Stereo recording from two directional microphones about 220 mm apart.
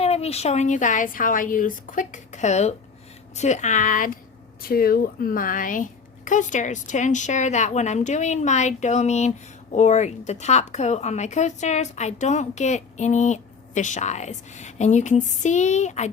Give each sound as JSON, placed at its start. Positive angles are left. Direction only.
{"t": 0.0, "sound": "speech", "side_deg": 30}